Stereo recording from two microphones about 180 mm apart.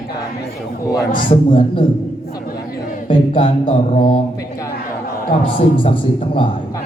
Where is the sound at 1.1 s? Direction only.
50° left (ahead or behind).